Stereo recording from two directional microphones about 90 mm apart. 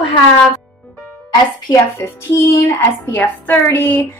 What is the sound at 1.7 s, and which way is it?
Speech, 35° left (ahead or behind).